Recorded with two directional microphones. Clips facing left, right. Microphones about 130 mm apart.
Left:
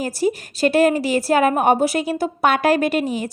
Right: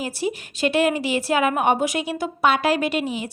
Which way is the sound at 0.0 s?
40° left (ahead or behind).